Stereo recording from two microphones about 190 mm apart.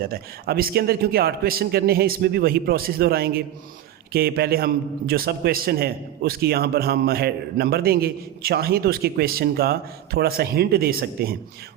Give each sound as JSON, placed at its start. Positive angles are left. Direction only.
{"t": 0.0, "sound": "a man's voice", "side_deg": -55}